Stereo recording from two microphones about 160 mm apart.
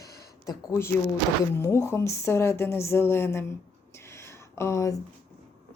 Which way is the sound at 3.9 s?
15° left (ahead or behind).